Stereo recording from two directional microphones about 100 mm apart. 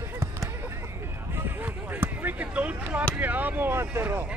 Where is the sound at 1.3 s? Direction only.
20° right (ahead or behind).